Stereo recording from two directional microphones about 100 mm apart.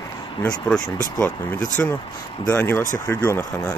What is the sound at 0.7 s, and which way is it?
Speech, 10° left (ahead or behind).